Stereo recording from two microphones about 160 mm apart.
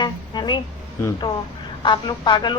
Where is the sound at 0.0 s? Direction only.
25° left (ahead or behind).